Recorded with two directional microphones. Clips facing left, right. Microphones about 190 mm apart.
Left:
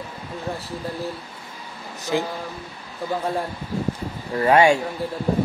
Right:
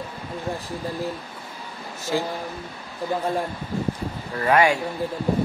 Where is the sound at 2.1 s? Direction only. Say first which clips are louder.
Left 1 dB; 20° left (ahead or behind).